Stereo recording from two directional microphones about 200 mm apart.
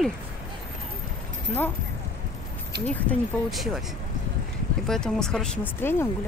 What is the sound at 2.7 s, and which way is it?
Speech, 55° right (ahead or behind).